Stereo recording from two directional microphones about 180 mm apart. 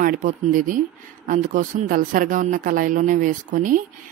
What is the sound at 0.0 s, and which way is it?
Speech, 45° right (ahead or behind).